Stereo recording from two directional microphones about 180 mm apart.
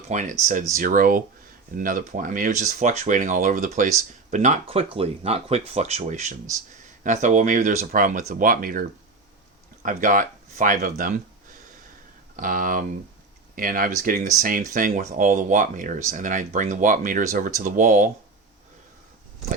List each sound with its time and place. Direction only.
0.1 s speech: 40° right (ahead or behind)
12.4 s speech: 50° right (ahead or behind)